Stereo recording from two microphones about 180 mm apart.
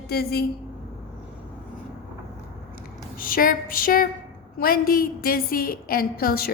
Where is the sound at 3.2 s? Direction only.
50° left (ahead or behind).